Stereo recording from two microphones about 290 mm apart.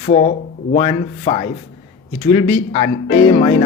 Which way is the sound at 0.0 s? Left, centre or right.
Left.